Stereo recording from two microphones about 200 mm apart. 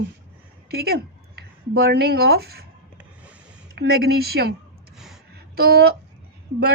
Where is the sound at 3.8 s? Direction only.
55° right (ahead or behind).